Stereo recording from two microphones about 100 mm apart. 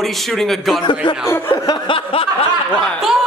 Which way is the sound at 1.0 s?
55° left (ahead or behind).